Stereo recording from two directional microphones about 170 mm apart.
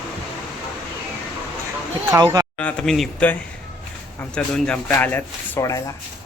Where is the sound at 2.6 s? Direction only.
5° left (ahead or behind).